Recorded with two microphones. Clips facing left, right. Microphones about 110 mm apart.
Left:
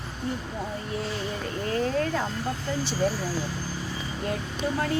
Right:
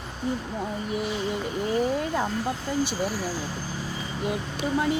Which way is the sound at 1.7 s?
15° right (ahead or behind).